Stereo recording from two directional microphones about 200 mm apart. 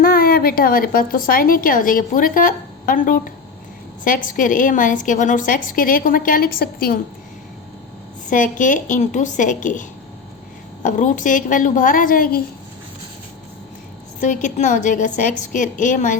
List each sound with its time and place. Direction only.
0.0 s a woman's voice: 50° left (ahead or behind)
8.3 s a woman's voice: 40° left (ahead or behind)
10.8 s a woman's voice: 40° left (ahead or behind)
14.2 s a woman's voice: 40° left (ahead or behind)